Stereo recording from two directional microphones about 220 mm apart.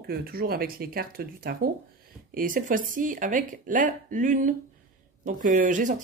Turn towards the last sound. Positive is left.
turn(degrees=-35)  # may be behind; listen again after turning